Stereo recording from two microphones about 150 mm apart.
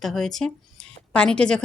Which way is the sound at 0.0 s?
Centre (ahead or behind).